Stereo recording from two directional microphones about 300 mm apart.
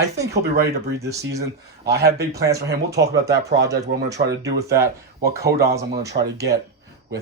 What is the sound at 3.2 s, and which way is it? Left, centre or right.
Speech, right.